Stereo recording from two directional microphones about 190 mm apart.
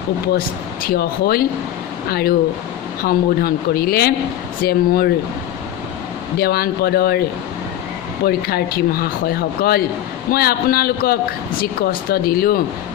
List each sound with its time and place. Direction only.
0.8 s speech: 55° left (ahead or behind)
6.3 s speech: 55° left (ahead or behind)
8.3 s speech: 55° left (ahead or behind)